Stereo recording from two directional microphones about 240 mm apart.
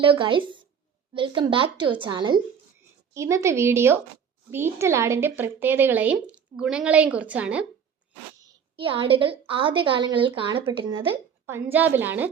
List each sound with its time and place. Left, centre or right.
0.0 s a woman's voice: right; by 7.7 s centre
8.4 s a woman's voice: centre